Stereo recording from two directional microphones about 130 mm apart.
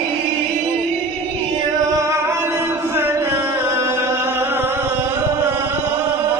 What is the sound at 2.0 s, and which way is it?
Music, 20° right (ahead or behind).